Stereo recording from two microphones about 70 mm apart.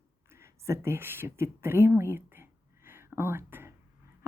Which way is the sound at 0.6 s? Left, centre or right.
Right.